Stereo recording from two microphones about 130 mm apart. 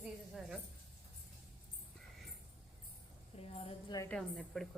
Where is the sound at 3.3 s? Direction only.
45° left (ahead or behind).